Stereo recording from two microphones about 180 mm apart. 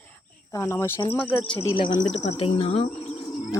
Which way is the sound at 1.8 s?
25° left (ahead or behind).